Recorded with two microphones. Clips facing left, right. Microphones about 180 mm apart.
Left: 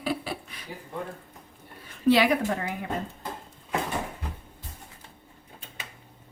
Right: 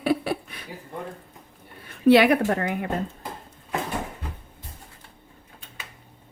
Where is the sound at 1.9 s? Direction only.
60° right (ahead or behind).